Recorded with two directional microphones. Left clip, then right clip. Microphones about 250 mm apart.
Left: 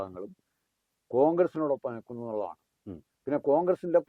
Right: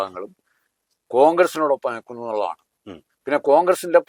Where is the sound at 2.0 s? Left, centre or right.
Right.